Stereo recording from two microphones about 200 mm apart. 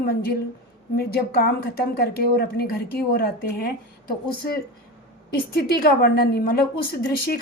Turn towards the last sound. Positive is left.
turn(degrees=50)  # may be behind; listen again after turning